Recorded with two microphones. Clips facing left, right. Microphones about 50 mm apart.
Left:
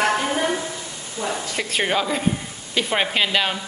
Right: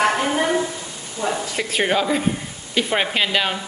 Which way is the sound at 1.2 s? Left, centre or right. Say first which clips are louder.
Right 2 dB; centre.